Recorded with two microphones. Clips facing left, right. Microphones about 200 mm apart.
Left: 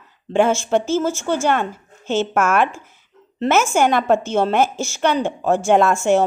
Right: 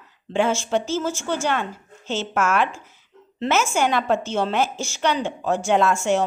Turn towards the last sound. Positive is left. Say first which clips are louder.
# left 4 dB
turn(degrees=50)  # may be behind; listen again after turning